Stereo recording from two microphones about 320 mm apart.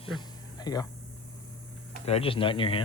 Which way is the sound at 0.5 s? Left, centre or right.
Centre.